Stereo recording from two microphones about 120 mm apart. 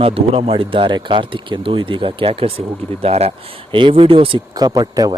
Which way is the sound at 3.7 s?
50° right (ahead or behind).